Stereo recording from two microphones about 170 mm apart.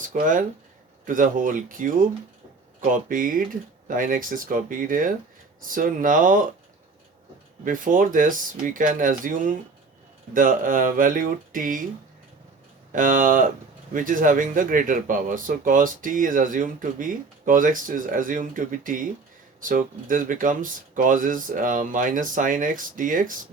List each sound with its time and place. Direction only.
0.0 s speech: 50° right (ahead or behind)
7.6 s speech: 50° right (ahead or behind)
12.9 s speech: 50° right (ahead or behind)